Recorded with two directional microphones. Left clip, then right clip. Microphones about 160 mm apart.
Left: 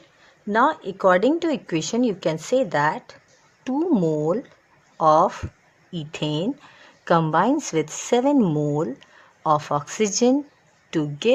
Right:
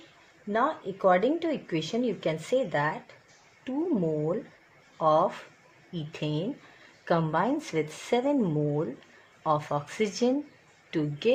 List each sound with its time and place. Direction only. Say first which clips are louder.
0.5 s a woman's voice: left 8 dB; 45° left (ahead or behind)